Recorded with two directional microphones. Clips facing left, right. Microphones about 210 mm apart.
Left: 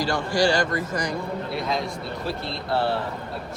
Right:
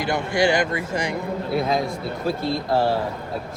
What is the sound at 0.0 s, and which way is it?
A man's voice, 20° right (ahead or behind).